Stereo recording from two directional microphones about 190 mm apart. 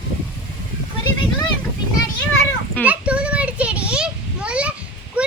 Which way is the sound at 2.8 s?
5° right (ahead or behind).